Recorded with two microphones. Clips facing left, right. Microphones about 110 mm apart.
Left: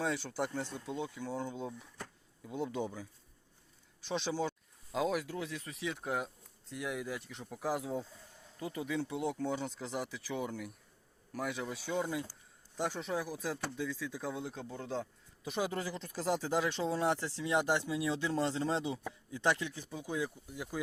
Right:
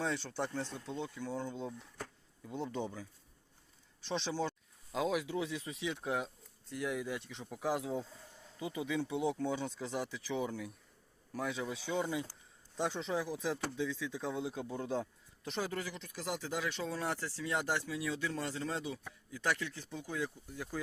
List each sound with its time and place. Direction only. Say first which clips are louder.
0.0 s speech: left 1 dB; 5° left (ahead or behind)
14.4 s speech: right 3 dB; 10° right (ahead or behind)
15.4 s speech: left 3 dB; 15° left (ahead or behind)
15.7 s speech: left 3 dB; 30° left (ahead or behind); by 20.7 s 10° left (ahead or behind)